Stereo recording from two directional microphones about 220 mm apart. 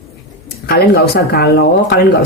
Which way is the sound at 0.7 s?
45° left (ahead or behind).